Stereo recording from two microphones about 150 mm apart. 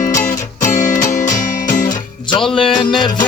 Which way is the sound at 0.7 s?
60° left (ahead or behind).